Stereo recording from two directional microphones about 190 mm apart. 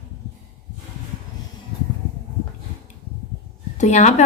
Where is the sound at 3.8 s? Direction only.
35° left (ahead or behind).